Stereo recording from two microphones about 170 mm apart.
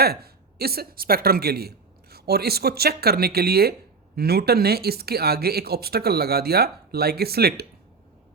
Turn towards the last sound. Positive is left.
turn(degrees=-65)  # may be behind; listen again after turning